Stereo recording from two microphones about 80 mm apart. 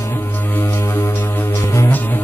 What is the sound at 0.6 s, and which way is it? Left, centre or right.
Music, left.